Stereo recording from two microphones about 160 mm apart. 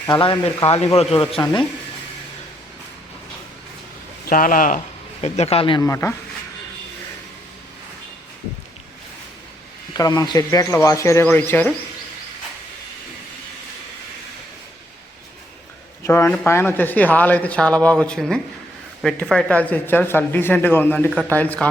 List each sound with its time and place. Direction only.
0.2 s speech: 35° left (ahead or behind)
4.3 s speech: 60° left (ahead or behind)
5.2 s speech: 40° left (ahead or behind)
5.8 s speech: 15° left (ahead or behind)
10.0 s speech: 25° left (ahead or behind)
16.0 s speech: 15° left (ahead or behind)